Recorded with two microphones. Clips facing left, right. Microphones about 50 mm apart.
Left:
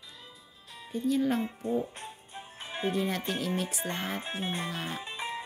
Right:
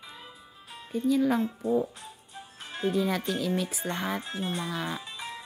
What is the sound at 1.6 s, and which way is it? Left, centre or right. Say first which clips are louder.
Music: right 4 dB; left.